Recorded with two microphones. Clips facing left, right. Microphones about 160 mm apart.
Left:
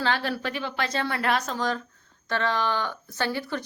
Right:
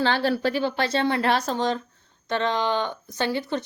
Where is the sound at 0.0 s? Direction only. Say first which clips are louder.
Right 5 dB; 30° right (ahead or behind).